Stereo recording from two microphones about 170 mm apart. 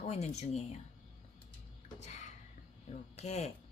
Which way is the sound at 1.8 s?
45° left (ahead or behind).